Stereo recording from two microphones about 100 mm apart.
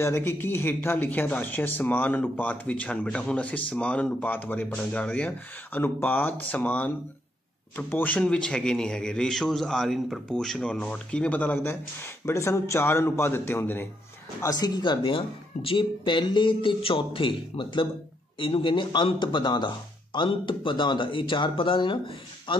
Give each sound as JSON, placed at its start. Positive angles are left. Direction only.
{"t": 0.0, "sound": "speech", "side_deg": 25}
{"t": 14.4, "sound": "speech", "side_deg": 40}